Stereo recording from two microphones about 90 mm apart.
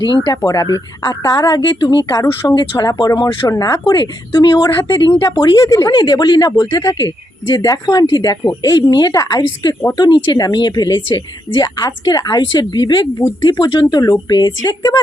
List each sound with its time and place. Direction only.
0.4 s speech: 40° left (ahead or behind)
2.7 s speech: 40° left (ahead or behind)
5.6 s speech: 35° left (ahead or behind)
5.9 s speech: 50° left (ahead or behind)
14.0 s speech: 45° left (ahead or behind)